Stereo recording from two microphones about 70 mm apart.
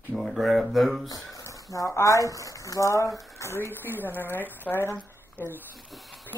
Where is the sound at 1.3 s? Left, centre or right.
Left.